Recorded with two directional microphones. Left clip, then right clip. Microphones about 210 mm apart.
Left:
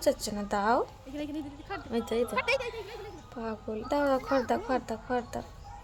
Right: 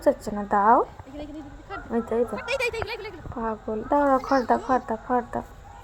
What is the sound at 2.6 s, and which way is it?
Speech, 30° right (ahead or behind).